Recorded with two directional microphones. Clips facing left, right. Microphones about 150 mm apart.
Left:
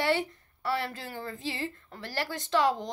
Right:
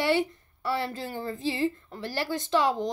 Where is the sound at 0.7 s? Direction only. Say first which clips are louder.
Right 4 dB; 30° right (ahead or behind).